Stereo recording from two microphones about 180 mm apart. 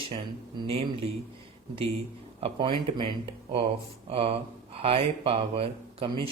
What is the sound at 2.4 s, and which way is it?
Speech, 30° right (ahead or behind).